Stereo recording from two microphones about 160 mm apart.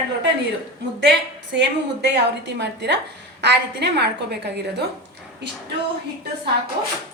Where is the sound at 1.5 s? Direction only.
90° right.